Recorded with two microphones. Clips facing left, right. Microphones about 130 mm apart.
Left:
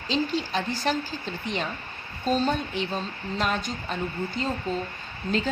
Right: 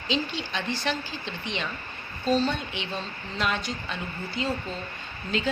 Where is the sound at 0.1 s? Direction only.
40° left (ahead or behind).